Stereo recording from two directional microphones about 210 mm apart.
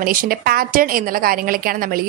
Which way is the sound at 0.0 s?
45° right (ahead or behind).